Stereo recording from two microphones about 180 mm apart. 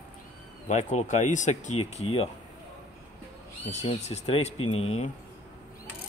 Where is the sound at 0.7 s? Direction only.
40° left (ahead or behind).